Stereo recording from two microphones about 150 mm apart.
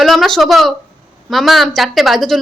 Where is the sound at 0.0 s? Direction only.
Centre (ahead or behind).